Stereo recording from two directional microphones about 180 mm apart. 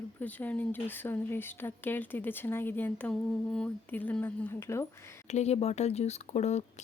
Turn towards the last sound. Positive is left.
turn(degrees=40)  # may be behind; listen again after turning